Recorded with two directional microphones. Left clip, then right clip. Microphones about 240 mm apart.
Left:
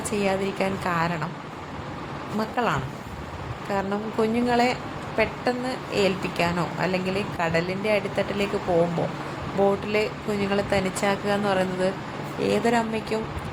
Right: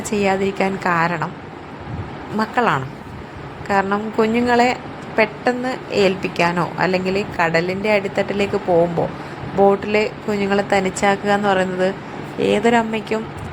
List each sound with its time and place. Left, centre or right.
0.1 s a woman's voice: centre
2.4 s a woman's voice: centre
9.6 s a woman's voice: centre